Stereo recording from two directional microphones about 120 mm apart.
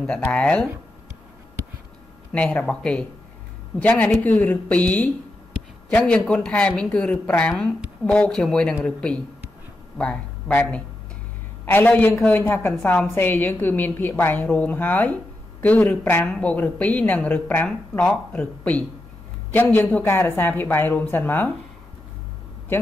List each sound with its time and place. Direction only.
0.0 s speech: 10° left (ahead or behind)
2.3 s a woman's voice: 10° left (ahead or behind)